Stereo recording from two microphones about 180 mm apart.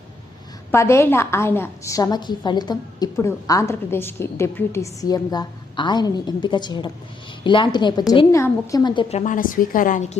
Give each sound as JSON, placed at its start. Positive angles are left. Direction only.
{"t": 0.7, "sound": "a woman's voice", "side_deg": 15}